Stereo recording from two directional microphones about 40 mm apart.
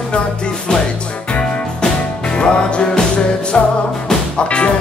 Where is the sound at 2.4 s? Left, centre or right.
Left.